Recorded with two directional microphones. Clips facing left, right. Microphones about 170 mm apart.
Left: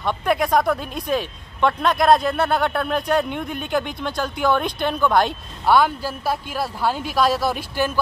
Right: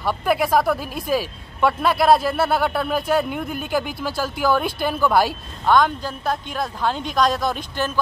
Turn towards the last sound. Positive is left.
turn(degrees=10)  # may be behind; listen again after turning